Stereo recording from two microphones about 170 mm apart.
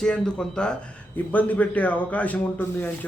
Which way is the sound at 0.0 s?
5° left (ahead or behind).